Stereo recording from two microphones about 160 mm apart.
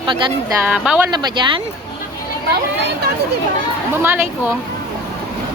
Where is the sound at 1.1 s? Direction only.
30° right (ahead or behind).